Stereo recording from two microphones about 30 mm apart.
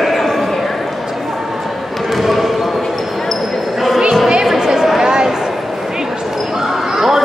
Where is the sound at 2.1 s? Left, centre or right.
Centre.